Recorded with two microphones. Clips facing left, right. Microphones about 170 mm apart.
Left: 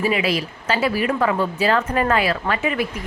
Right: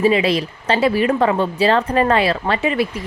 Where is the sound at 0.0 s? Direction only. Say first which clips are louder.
Right 5 dB; 35° right (ahead or behind).